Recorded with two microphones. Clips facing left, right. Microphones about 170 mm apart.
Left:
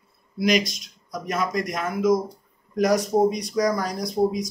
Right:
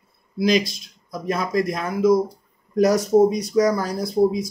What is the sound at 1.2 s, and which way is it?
Speech, 30° right (ahead or behind).